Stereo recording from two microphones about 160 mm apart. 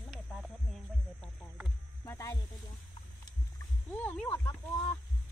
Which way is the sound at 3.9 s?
10° left (ahead or behind).